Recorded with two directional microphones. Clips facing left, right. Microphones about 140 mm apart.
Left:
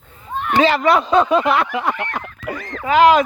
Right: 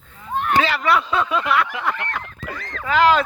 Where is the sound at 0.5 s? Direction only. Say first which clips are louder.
Left 5 dB; 30° left (ahead or behind).